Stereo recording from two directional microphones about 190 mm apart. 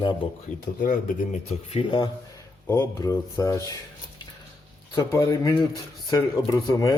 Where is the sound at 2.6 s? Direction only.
15° left (ahead or behind).